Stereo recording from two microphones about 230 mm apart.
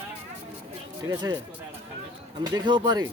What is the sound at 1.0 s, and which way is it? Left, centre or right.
Speech, centre.